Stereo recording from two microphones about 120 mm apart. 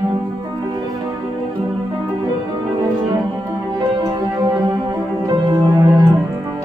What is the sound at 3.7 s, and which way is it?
Music, 30° right (ahead or behind).